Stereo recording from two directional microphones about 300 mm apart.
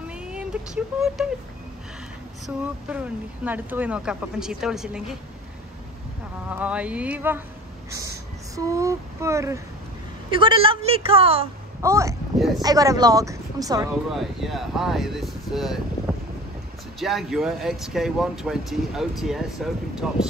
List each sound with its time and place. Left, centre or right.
0.2 s vehicle: centre
1.0 s speech: centre
2.4 s speech: centre
6.5 s speech: centre
8.5 s child singing: centre
10.3 s a woman's voice: centre
12.6 s a woman's voice: centre
14.1 s speech: centre
17.0 s speech: centre